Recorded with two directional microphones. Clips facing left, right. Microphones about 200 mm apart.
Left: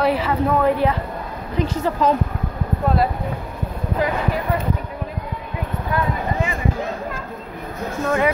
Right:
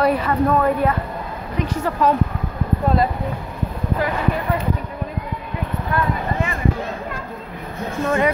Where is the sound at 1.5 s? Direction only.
25° left (ahead or behind).